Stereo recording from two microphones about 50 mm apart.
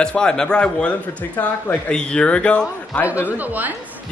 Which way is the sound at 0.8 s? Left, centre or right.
Left.